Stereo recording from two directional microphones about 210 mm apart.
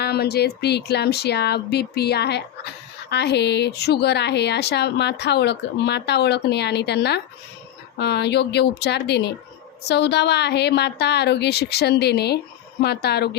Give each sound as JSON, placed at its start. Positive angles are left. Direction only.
{"t": 0.0, "sound": "a woman's voice", "side_deg": 50}